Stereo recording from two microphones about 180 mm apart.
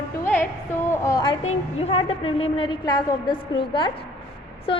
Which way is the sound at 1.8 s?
35° left (ahead or behind).